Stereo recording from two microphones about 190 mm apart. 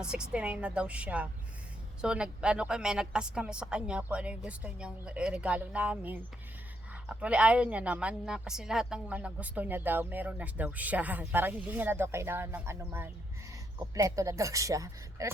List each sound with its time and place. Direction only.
0.0 s a woman's voice: 5° right (ahead or behind)